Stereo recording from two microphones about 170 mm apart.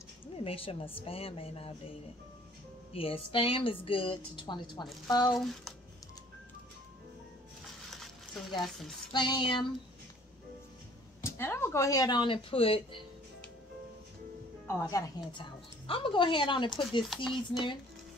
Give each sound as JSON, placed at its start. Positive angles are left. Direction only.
{"t": 0.4, "sound": "a woman's voice", "side_deg": 35}
{"t": 5.3, "sound": "speech", "side_deg": 0}
{"t": 8.5, "sound": "speech", "side_deg": 0}
{"t": 9.1, "sound": "speech", "side_deg": 25}
{"t": 11.2, "sound": "speech", "side_deg": 15}
{"t": 14.7, "sound": "speech", "side_deg": 15}
{"t": 15.9, "sound": "speech", "side_deg": 30}
{"t": 17.1, "sound": "speech", "side_deg": 0}